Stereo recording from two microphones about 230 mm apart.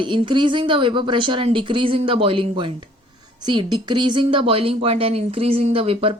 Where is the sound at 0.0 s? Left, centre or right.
Right.